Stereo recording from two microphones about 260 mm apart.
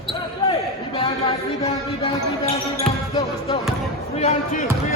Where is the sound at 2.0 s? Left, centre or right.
Left.